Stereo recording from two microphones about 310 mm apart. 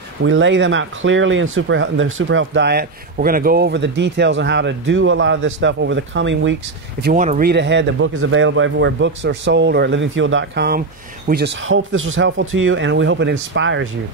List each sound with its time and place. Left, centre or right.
0.2 s speech: right